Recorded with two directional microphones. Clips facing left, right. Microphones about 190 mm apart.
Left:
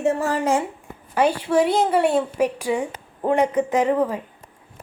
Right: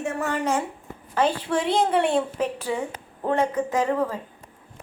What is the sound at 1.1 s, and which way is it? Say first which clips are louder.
A woman's voice: left 4 dB; 10° left (ahead or behind).